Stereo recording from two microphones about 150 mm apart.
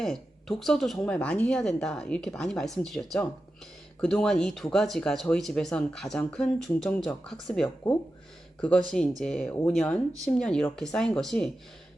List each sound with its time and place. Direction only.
0.0 s a woman's voice: 5° left (ahead or behind)
9.2 s speech: 5° left (ahead or behind)
9.5 s speech: 15° left (ahead or behind)